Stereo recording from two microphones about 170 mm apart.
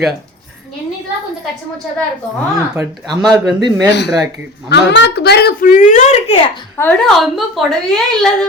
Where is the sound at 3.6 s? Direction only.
20° right (ahead or behind).